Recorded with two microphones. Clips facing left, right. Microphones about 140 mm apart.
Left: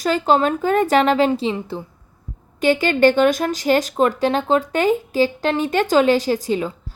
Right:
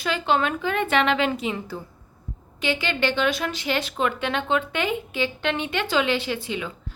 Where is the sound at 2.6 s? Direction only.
45° left (ahead or behind).